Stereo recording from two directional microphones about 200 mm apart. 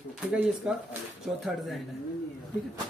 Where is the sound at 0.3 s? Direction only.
5° right (ahead or behind).